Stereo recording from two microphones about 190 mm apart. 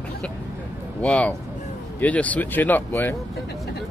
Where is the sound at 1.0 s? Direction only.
5° left (ahead or behind).